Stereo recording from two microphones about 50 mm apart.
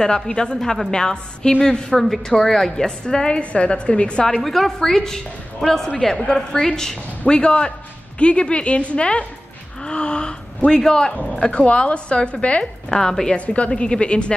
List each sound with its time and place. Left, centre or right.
0.0 s a woman's voice: centre
4.4 s a woman's voice: centre
11.3 s a woman's voice: left
12.9 s a woman's voice: centre